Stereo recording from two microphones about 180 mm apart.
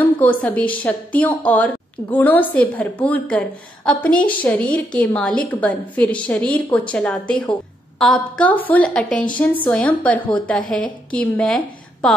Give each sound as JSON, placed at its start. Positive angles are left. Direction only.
{"t": 0.0, "sound": "a woman's voice", "side_deg": 10}